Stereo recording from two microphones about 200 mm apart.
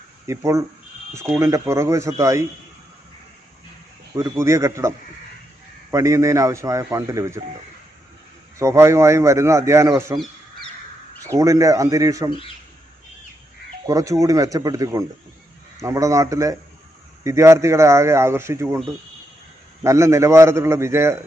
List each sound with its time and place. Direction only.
0.3 s speech: 15° right (ahead or behind)
4.1 s speech: 15° right (ahead or behind)
8.5 s speech: 15° right (ahead or behind)
11.3 s speech: 15° right (ahead or behind)
13.8 s speech: 15° right (ahead or behind)
19.8 s speech: 15° right (ahead or behind)